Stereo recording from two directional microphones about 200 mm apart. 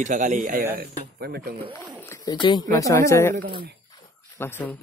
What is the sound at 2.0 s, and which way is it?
Speech, 15° left (ahead or behind).